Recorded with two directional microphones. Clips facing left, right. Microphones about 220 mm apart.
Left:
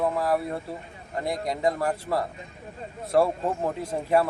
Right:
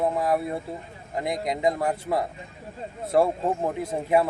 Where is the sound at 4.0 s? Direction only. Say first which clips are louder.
Right 1 dB; 15° right (ahead or behind).